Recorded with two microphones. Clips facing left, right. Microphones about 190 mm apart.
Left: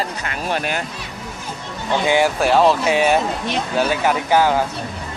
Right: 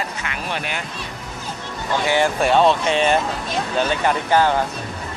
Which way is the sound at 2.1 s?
10° left (ahead or behind).